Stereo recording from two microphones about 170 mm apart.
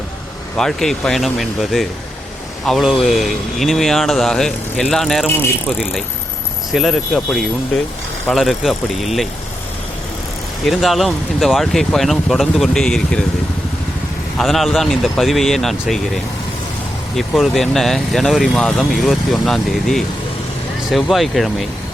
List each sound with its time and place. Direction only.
0.5 s speech: 5° left (ahead or behind)
10.7 s speech: centre (ahead or behind)
14.3 s speech: centre (ahead or behind)
17.2 s speech: centre (ahead or behind)